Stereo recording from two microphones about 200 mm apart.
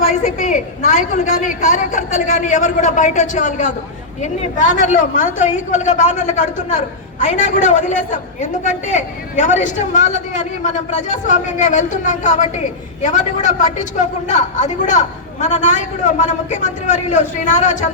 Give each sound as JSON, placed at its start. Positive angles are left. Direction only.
{"t": 0.1, "sound": "a woman's voice", "side_deg": 40}